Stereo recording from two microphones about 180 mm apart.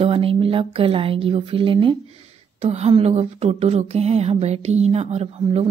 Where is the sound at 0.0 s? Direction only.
30° right (ahead or behind).